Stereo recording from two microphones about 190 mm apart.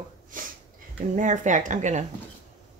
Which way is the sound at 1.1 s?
40° right (ahead or behind).